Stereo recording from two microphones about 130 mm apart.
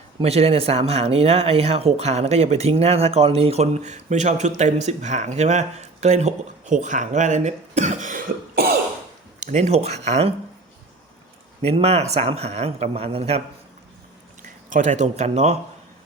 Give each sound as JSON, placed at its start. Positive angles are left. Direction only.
{"t": 0.2, "sound": "speech", "side_deg": -50}
{"t": 9.4, "sound": "speech", "side_deg": -65}
{"t": 11.6, "sound": "a man's voice", "side_deg": -55}
{"t": 14.4, "sound": "speech", "side_deg": -80}